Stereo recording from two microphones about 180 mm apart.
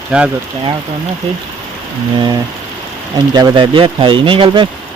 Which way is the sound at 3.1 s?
20° right (ahead or behind).